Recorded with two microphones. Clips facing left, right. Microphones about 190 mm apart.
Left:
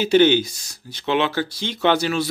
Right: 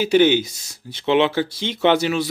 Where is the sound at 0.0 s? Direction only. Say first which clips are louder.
Even; 10° right (ahead or behind).